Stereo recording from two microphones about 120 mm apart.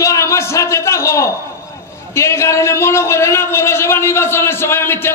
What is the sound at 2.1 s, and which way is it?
A man's voice, 25° left (ahead or behind).